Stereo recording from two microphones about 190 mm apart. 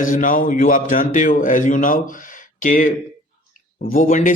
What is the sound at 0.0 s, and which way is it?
Speech, 45° left (ahead or behind).